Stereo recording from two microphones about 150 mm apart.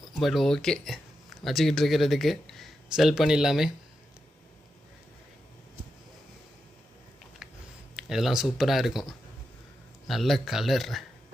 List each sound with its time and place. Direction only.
0.2 s speech: centre (ahead or behind)
7.9 s speech: 5° right (ahead or behind)